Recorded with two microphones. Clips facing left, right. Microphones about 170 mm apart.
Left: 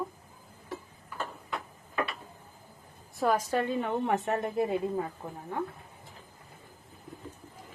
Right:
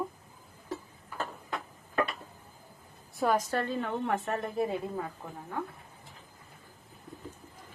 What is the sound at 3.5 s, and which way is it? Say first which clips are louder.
Speech: left 3 dB; 15° left (ahead or behind).